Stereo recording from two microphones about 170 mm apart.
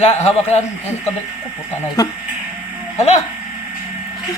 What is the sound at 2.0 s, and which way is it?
Speech, 20° left (ahead or behind).